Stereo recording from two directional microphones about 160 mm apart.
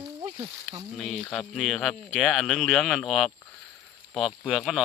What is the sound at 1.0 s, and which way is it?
Speech, centre (ahead or behind).